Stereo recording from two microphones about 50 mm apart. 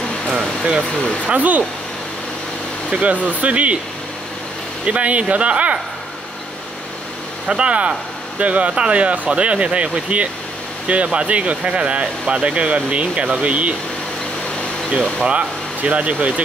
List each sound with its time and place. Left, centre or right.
0.9 s speech: left
1.3 s speech: right
2.9 s speech: right
4.8 s speech: right
7.4 s speech: right
15.2 s speech: right